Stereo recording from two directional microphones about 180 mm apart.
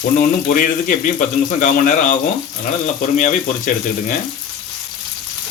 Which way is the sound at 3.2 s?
45° left (ahead or behind).